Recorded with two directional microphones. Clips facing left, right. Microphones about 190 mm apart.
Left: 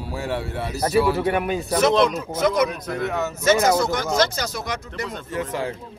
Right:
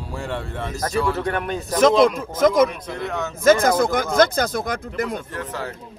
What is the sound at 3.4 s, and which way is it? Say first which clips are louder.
Speech: right 3 dB; 50° right (ahead or behind).